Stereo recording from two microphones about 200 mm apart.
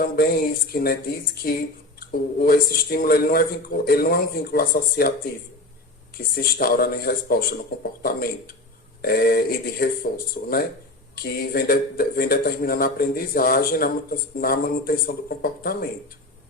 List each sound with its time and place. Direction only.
0.0 s a man's voice: 50° left (ahead or behind)
2.0 s a man's voice: 50° left (ahead or behind)
6.1 s a man's voice: 50° left (ahead or behind)